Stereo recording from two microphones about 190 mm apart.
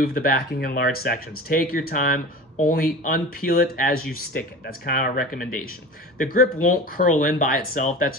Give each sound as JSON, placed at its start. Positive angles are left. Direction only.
{"t": 0.0, "sound": "speech", "side_deg": 50}